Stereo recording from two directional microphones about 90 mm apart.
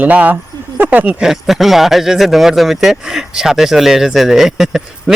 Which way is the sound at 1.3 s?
Centre (ahead or behind).